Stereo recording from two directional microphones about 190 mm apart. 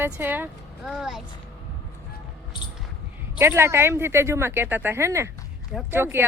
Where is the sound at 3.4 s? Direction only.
15° right (ahead or behind).